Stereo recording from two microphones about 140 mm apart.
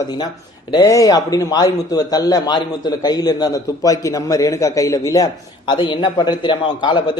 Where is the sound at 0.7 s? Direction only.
25° left (ahead or behind).